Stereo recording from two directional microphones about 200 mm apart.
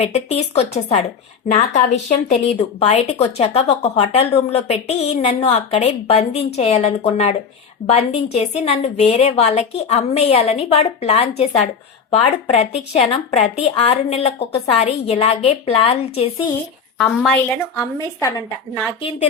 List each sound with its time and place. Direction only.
0.0 s a woman's voice: 35° left (ahead or behind)
17.7 s a woman's voice: 15° left (ahead or behind)
18.9 s a woman's voice: 25° left (ahead or behind)